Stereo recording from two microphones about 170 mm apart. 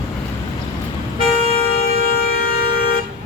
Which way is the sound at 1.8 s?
60° left (ahead or behind).